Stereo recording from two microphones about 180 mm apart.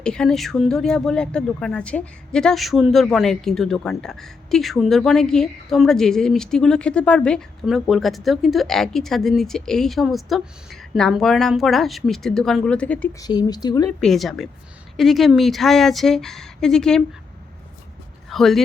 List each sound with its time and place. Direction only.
0.0 s a woman's voice: 5° left (ahead or behind)
13.1 s speech: 20° left (ahead or behind)
14.0 s a woman's voice: centre (ahead or behind)
18.3 s speech: centre (ahead or behind)